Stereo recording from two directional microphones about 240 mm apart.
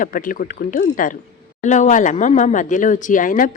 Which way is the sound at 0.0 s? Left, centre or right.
Left.